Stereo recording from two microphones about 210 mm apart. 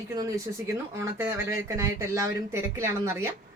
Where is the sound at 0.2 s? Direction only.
15° right (ahead or behind).